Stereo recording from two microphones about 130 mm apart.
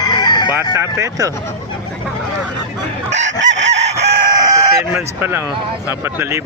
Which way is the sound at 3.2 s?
65° right (ahead or behind).